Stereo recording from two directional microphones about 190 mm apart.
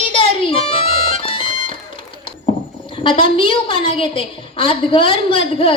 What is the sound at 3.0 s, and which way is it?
A woman's voice, 30° left (ahead or behind).